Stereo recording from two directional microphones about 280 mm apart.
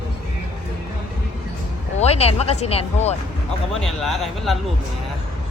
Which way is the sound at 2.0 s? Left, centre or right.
Left.